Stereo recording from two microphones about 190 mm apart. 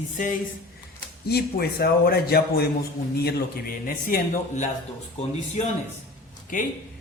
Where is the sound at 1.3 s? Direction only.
55° left (ahead or behind).